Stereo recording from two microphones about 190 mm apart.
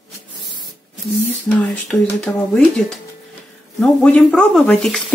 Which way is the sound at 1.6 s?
Centre (ahead or behind).